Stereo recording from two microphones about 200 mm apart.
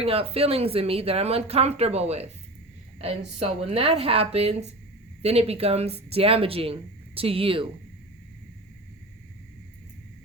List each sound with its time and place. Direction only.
0.0 s a woman's voice: 30° right (ahead or behind)